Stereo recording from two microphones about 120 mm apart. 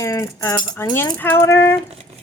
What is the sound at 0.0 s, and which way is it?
Speech, 25° left (ahead or behind).